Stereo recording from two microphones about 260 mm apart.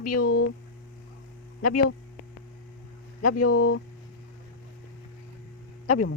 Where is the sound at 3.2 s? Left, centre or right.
Left.